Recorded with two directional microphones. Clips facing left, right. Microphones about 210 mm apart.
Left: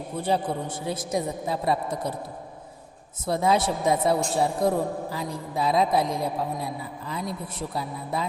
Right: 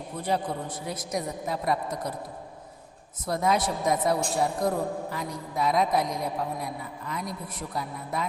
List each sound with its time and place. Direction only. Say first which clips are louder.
0.2 s a man's voice: left 3 dB; 30° left (ahead or behind)
3.2 s a man's voice: left 3 dB; 30° left (ahead or behind)